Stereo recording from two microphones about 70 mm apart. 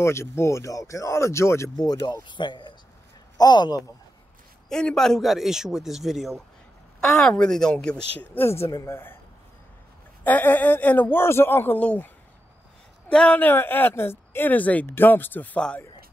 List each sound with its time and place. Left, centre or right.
0.0 s speech: left
1.8 s a man's voice: left
4.6 s a man's voice: centre
7.2 s speech: centre
8.4 s speech: left
10.2 s speech: left
11.8 s speech: centre
13.1 s speech: centre
13.4 s speech: left